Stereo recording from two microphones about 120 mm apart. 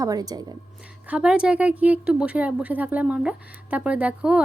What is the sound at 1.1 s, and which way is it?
A woman's voice, 10° right (ahead or behind).